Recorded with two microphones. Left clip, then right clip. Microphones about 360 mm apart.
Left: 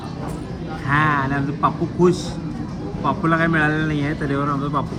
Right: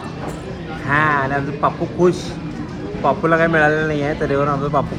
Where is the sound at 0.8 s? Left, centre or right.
Centre.